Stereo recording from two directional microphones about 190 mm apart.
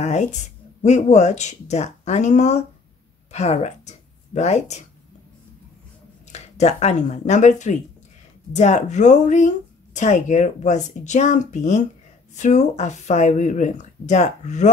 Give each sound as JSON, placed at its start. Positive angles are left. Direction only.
{"t": 0.0, "sound": "speech", "side_deg": 40}
{"t": 6.3, "sound": "speech", "side_deg": 35}